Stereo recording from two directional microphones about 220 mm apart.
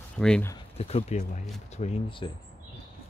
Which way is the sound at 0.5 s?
30° left (ahead or behind).